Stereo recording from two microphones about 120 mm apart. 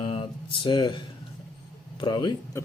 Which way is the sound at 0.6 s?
40° left (ahead or behind).